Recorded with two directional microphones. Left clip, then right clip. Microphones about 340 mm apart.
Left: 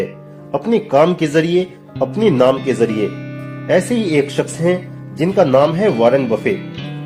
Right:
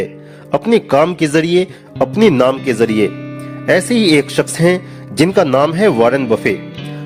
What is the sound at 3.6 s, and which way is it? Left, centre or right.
Speech, right.